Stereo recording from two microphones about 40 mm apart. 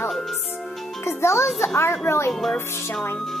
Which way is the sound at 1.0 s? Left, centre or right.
Left.